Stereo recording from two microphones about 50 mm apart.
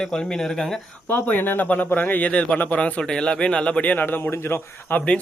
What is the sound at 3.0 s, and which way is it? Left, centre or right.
Speech, centre.